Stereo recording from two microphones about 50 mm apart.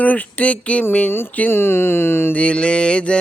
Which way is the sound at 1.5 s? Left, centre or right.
Left.